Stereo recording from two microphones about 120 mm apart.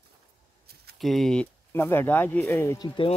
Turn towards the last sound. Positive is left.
turn(degrees=35)  # may be behind; listen again after turning